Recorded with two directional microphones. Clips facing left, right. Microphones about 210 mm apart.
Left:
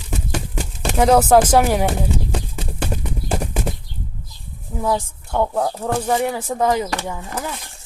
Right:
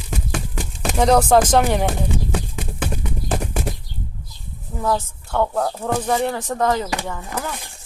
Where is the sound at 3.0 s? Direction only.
5° left (ahead or behind).